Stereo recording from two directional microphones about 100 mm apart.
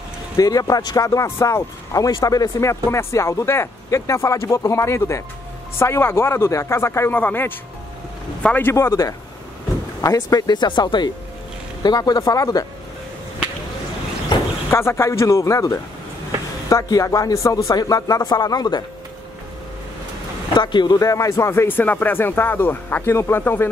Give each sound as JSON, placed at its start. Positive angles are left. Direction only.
{"t": 0.4, "sound": "a man's voice", "side_deg": 40}
{"t": 8.7, "sound": "speech", "side_deg": 35}
{"t": 14.7, "sound": "speech", "side_deg": 25}
{"t": 20.5, "sound": "speech", "side_deg": 50}
{"t": 21.0, "sound": "speech", "side_deg": 35}